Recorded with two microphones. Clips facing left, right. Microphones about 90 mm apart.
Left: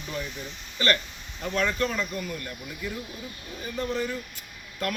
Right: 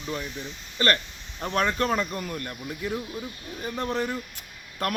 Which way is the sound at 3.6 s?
50° right (ahead or behind).